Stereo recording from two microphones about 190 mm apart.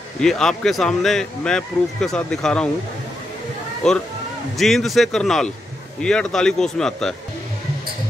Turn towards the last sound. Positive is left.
turn(degrees=5)  # may be behind; listen again after turning